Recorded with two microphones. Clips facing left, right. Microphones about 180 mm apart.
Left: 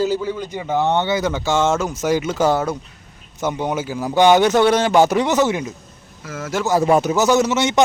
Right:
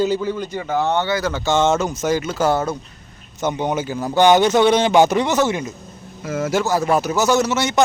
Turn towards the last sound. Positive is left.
turn(degrees=20)  # may be behind; listen again after turning